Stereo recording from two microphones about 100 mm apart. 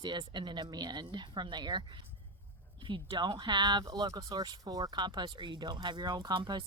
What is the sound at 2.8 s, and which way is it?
Speech, 55° right (ahead or behind).